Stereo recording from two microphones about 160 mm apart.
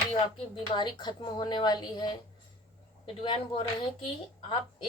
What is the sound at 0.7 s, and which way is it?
A woman's voice, 25° left (ahead or behind).